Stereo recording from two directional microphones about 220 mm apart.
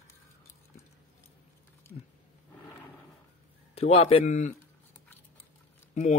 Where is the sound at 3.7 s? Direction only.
25° left (ahead or behind).